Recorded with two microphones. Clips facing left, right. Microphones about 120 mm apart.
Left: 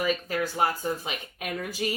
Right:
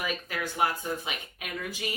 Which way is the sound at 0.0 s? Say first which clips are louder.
Left 6 dB; 35° left (ahead or behind).